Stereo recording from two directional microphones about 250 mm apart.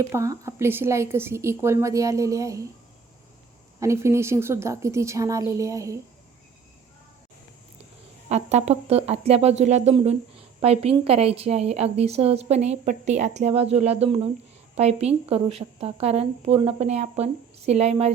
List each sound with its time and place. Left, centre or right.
0.0 s a woman's voice: centre
3.8 s a woman's voice: centre
8.3 s speech: right